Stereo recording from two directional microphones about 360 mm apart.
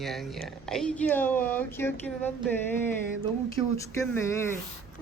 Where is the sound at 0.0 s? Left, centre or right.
Centre.